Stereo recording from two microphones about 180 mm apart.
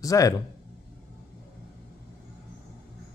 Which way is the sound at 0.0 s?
20° left (ahead or behind).